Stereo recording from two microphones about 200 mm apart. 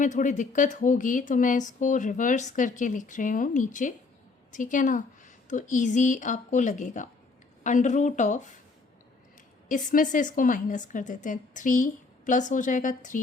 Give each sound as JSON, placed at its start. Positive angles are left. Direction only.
{"t": 0.0, "sound": "speech", "side_deg": 40}
{"t": 9.6, "sound": "speech", "side_deg": 40}